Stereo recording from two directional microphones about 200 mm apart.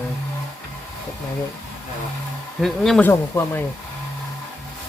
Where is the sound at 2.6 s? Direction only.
Centre (ahead or behind).